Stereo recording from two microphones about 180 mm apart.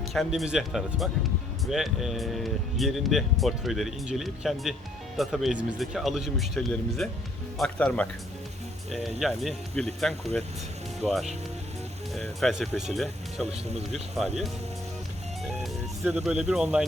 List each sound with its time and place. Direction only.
0.1 s speech: centre (ahead or behind)
9.2 s speech: centre (ahead or behind)
13.5 s speech: 35° right (ahead or behind)
15.4 s music: centre (ahead or behind)
16.2 s speech: 5° right (ahead or behind)